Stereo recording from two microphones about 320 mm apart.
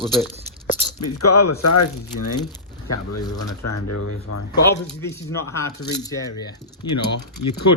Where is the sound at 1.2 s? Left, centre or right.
Left.